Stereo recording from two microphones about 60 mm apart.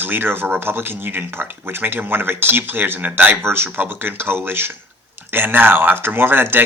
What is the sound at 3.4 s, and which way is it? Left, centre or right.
Speech, right.